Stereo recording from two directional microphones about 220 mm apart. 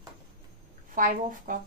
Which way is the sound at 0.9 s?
35° right (ahead or behind).